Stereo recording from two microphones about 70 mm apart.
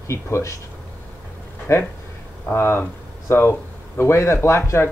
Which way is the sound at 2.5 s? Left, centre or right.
Left.